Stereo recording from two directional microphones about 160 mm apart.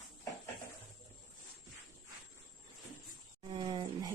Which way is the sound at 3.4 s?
30° right (ahead or behind).